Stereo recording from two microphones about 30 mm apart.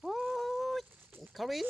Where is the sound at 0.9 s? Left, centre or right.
Right.